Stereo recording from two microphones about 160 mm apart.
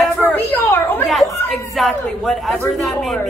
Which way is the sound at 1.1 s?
Centre (ahead or behind).